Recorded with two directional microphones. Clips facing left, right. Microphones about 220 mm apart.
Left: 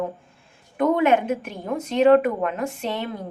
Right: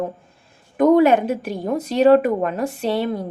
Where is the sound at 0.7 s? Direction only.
40° right (ahead or behind).